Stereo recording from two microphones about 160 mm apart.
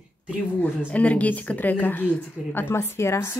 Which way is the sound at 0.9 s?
10° left (ahead or behind).